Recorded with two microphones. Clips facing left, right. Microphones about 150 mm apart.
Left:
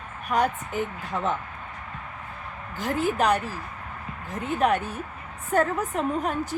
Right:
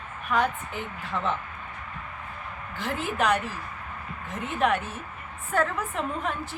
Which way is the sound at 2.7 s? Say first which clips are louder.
Left 4 dB; 40° left (ahead or behind).